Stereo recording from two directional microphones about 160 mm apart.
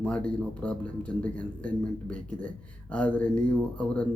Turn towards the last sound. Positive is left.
turn(degrees=5)  # may be behind; listen again after turning